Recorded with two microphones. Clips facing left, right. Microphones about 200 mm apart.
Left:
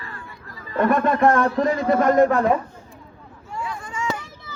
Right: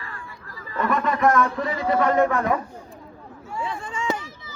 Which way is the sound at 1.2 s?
30° left (ahead or behind).